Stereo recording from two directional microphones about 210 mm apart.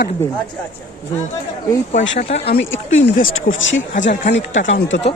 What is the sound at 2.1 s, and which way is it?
Speech, 30° left (ahead or behind).